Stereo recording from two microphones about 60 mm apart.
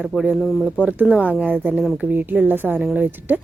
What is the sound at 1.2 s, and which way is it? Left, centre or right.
A woman's voice, right.